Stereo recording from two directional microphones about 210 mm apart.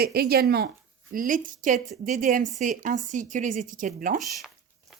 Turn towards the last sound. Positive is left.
turn(degrees=0)  # may be behind; listen again after turning